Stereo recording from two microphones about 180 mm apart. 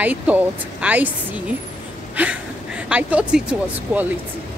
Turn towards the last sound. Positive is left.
turn(degrees=-10)  # may be behind; listen again after turning